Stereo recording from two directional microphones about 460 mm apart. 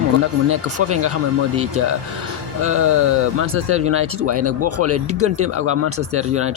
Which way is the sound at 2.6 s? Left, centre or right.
Right.